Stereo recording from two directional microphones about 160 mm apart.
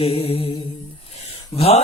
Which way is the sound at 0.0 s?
35° left (ahead or behind).